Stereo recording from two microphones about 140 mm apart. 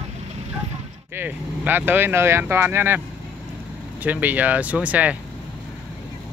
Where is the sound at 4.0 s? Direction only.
10° right (ahead or behind).